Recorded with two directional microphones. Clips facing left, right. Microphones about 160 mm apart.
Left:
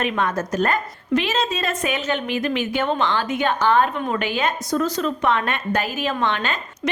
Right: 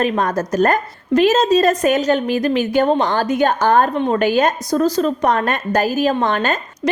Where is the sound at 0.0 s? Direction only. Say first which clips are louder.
Right 5 dB; 40° right (ahead or behind).